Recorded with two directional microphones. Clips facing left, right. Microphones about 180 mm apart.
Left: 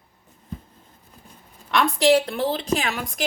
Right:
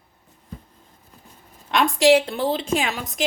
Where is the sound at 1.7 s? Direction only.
20° right (ahead or behind).